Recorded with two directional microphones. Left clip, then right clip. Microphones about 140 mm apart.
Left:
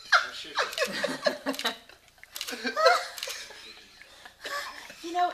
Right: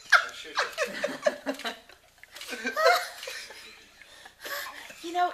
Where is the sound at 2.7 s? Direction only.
30° right (ahead or behind).